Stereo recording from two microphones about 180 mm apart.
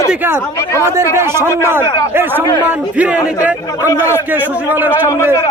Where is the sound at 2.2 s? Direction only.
10° right (ahead or behind).